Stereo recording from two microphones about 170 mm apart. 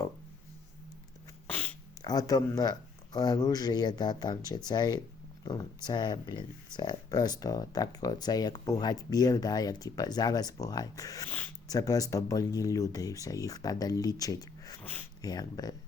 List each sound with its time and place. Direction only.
1.5 s a sound: 10° left (ahead or behind)
2.0 s speech: 20° left (ahead or behind)
14.8 s speech: 10° left (ahead or behind)
15.2 s speech: 20° left (ahead or behind)